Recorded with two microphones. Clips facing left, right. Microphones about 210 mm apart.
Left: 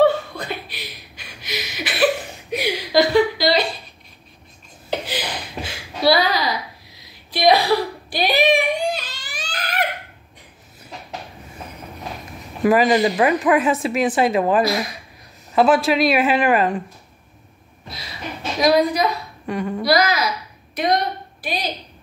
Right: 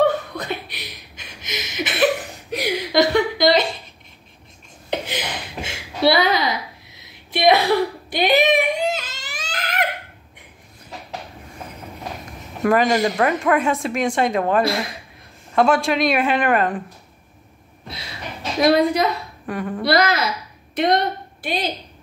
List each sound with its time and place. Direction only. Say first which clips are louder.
0.1 s chuckle: right 1 dB; 20° right (ahead or behind)
2.9 s a sound: left 2 dB; 20° right (ahead or behind)
5.0 s a sound: left 1 dB; 25° right (ahead or behind)
12.6 s speech: left 2 dB; 5° left (ahead or behind)
14.6 s a woman's voice: left 1 dB; 30° right (ahead or behind)
15.5 s speech: left 2 dB; 5° left (ahead or behind)
18.6 s a woman's voice: right 1 dB; 25° right (ahead or behind)
19.4 s speech: left 2 dB; centre (ahead or behind)
19.8 s a woman's voice: even; 25° right (ahead or behind)
20.7 s a sound: right 2 dB; 25° right (ahead or behind)